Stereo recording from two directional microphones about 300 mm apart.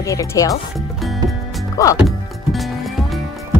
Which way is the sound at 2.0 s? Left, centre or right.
Centre.